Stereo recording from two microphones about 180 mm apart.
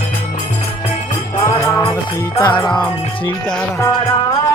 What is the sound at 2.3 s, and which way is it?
Music, 25° left (ahead or behind).